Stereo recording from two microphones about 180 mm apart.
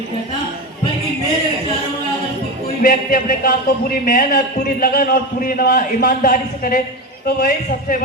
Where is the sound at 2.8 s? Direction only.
50° left (ahead or behind).